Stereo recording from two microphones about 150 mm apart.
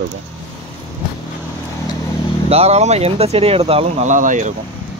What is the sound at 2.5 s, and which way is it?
Speech, 45° right (ahead or behind).